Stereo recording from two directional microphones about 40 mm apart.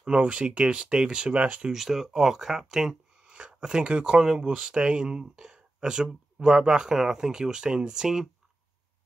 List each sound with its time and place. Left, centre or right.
0.0 s speech: right
1.7 s speech: centre
3.3 s speech: right